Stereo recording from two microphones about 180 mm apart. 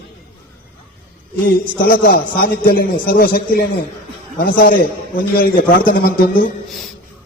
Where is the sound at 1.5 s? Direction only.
55° left (ahead or behind).